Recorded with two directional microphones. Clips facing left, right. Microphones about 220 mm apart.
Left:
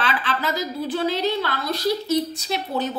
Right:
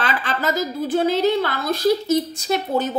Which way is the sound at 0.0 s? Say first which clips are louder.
Right 2 dB; 45° right (ahead or behind).